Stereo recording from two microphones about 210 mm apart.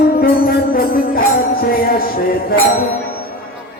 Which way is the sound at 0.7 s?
45° left (ahead or behind).